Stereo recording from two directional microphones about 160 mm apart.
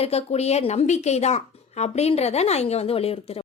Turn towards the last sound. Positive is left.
turn(degrees=40)  # may be behind; listen again after turning